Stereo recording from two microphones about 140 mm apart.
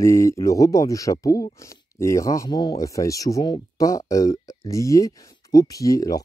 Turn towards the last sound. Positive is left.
turn(degrees=25)  # may be behind; listen again after turning